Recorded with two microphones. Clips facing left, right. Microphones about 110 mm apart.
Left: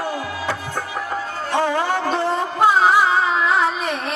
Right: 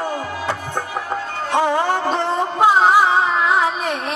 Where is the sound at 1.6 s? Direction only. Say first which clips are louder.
Right 2 dB; 15° right (ahead or behind).